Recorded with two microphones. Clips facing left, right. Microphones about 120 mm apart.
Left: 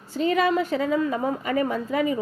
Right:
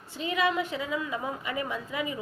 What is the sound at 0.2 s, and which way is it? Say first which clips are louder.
A woman's voice: left 6 dB; 40° left (ahead or behind).